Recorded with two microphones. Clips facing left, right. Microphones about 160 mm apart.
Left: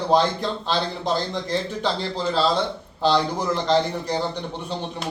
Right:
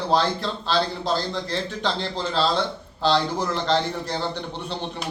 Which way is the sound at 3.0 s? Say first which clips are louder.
Left 1 dB; 10° left (ahead or behind).